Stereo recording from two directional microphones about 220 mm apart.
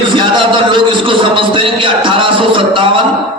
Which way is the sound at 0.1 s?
20° right (ahead or behind).